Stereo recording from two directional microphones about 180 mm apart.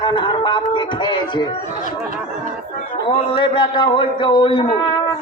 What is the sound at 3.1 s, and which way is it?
A man's voice, 30° left (ahead or behind).